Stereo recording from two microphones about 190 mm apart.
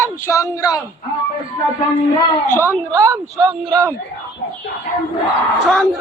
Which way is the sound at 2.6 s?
15° right (ahead or behind).